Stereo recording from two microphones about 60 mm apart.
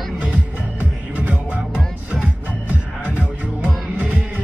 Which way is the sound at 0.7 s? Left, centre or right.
Right.